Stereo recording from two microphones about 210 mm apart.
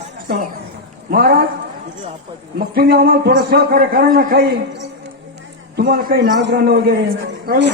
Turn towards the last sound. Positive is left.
turn(degrees=-50)  # may be behind; listen again after turning